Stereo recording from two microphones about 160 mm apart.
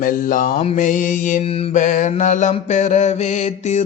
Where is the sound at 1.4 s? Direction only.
40° left (ahead or behind).